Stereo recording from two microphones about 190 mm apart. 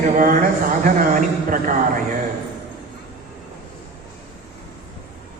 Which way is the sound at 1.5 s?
45° right (ahead or behind).